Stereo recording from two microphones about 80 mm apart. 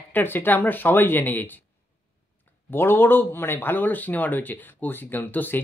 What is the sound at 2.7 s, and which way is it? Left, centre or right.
Speech, left.